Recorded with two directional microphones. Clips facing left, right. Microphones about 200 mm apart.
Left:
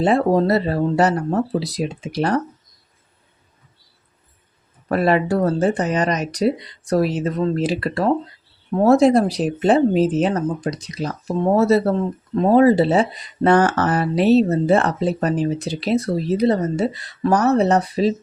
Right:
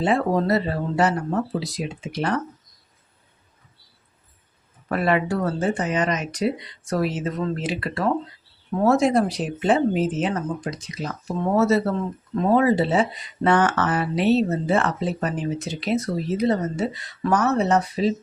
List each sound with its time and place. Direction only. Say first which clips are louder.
0.0 s speech: left 5 dB; 35° left (ahead or behind)
4.9 s speech: left 4 dB; 35° left (ahead or behind)